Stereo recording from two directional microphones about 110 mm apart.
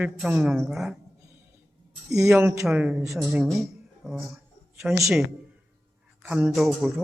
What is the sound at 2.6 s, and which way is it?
A woman's voice, 10° right (ahead or behind).